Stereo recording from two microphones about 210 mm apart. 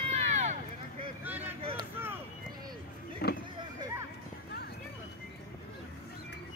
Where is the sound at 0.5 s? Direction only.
25° right (ahead or behind).